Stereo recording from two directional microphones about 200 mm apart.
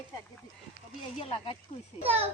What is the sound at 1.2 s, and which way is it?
Speech, 30° left (ahead or behind).